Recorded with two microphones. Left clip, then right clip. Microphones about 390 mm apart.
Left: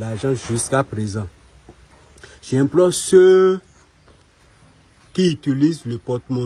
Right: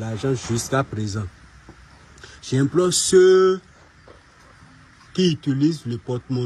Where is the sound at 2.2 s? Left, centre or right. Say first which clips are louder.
Left 4 dB; centre.